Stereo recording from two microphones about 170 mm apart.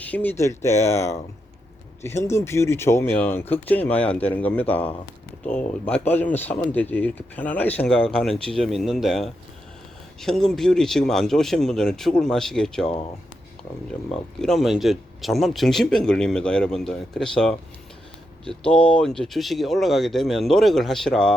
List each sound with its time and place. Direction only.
0.0 s speech: 10° left (ahead or behind)
14.3 s speech: centre (ahead or behind)
18.6 s speech: 5° left (ahead or behind)